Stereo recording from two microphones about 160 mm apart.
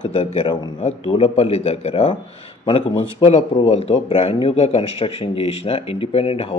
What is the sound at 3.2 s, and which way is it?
A man's voice, 35° left (ahead or behind).